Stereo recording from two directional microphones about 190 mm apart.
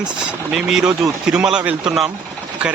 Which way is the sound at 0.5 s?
5° right (ahead or behind).